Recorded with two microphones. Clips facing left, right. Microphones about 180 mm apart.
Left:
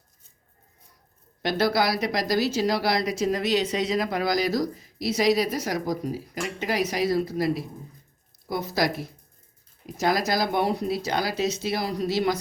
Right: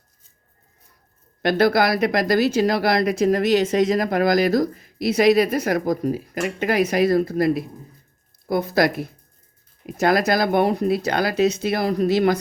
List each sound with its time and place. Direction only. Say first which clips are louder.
1.4 s speech: right 6 dB; 55° right (ahead or behind)